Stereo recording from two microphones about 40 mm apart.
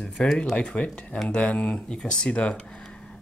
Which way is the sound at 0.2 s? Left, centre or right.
Left.